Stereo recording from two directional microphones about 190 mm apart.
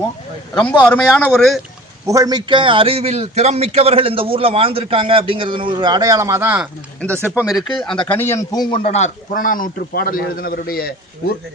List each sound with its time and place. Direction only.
0.9 s speech: 5° left (ahead or behind)
2.0 s a man's voice: 20° right (ahead or behind)
7.0 s a man's voice: 5° left (ahead or behind); by 10.9 s 50° left (ahead or behind)